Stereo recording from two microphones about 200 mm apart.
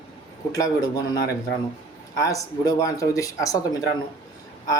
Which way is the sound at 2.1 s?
15° left (ahead or behind).